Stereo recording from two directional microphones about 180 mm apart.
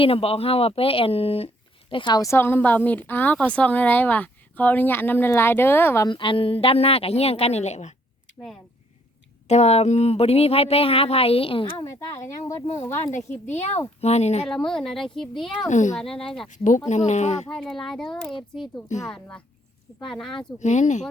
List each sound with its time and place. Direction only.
0.0 s a woman's voice: 30° left (ahead or behind); by 6.1 s 10° left (ahead or behind)
6.1 s speech: 25° left (ahead or behind)
9.5 s speech: 35° left (ahead or behind)
11.9 s a woman's voice: 15° left (ahead or behind)
12.6 s speech: 35° left (ahead or behind)
14.4 s speech: 5° left (ahead or behind)
15.7 s speech: 40° left (ahead or behind)
16.0 s speech: 5° left (ahead or behind)
16.5 s speech: 45° left (ahead or behind)
17.6 s speech: centre (ahead or behind)
20.6 s speech: 40° left (ahead or behind)